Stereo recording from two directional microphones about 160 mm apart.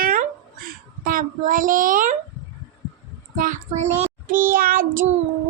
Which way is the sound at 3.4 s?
55° right (ahead or behind).